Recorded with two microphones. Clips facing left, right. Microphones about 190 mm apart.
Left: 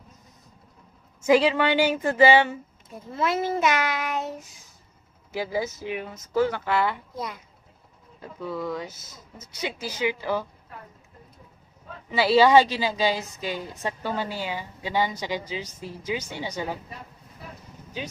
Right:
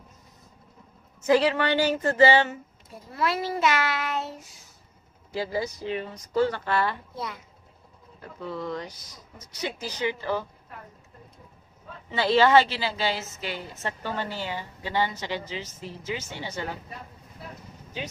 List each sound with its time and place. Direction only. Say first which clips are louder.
1.2 s a woman's voice: left 2 dB; 15° left (ahead or behind)
8.4 s a woman's voice: left 2 dB; 5° left (ahead or behind)
8.9 s speech: left 1 dB; 25° left (ahead or behind)
9.6 s a woman's voice: left 1 dB; 10° left (ahead or behind)
12.1 s a woman's voice: left 2 dB; 10° left (ahead or behind)